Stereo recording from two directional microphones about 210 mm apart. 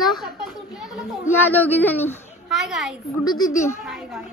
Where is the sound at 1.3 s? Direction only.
10° left (ahead or behind).